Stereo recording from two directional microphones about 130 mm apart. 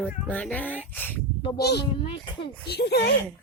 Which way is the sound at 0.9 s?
15° left (ahead or behind).